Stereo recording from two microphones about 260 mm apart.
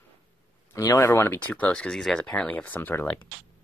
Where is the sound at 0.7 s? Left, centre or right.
Centre.